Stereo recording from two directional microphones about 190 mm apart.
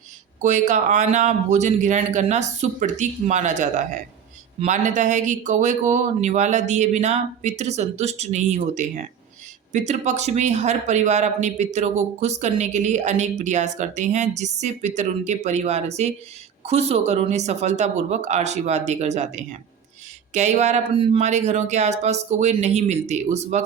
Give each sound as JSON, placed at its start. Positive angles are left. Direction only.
{"t": 0.4, "sound": "speech", "side_deg": -40}